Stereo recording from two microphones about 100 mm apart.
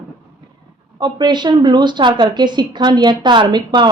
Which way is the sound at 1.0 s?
45° right (ahead or behind).